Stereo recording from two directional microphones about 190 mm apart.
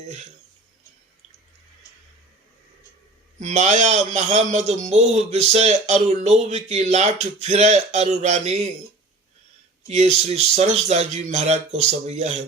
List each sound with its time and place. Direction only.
3.4 s a man's voice: 35° right (ahead or behind)
9.8 s a man's voice: 35° right (ahead or behind)